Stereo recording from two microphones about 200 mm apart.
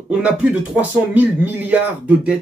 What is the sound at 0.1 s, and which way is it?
Speech, 5° right (ahead or behind).